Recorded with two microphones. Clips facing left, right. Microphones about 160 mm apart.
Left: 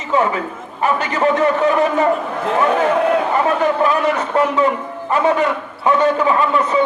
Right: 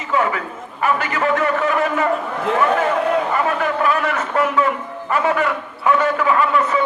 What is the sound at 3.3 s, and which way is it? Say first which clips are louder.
A man's voice: left 4 dB; 20° left (ahead or behind).